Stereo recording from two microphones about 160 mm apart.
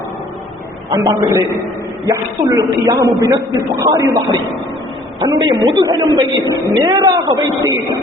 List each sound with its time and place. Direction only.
0.9 s a woman's voice: 20° right (ahead or behind)